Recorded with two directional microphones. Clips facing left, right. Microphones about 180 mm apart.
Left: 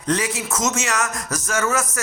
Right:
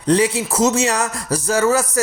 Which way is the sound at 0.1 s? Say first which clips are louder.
Right 6 dB; 30° right (ahead or behind).